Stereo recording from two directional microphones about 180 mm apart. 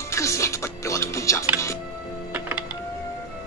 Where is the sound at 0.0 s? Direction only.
15° left (ahead or behind).